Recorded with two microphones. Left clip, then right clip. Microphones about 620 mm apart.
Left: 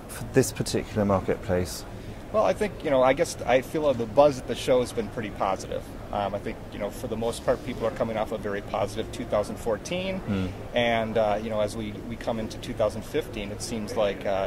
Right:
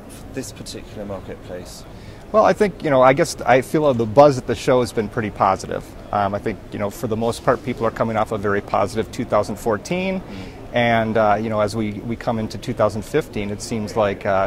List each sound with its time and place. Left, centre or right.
0.3 s speech: left
2.3 s speech: right